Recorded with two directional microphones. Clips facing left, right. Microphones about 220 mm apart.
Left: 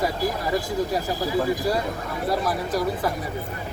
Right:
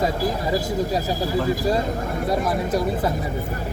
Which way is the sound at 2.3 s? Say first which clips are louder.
Right 3 dB; 25° right (ahead or behind).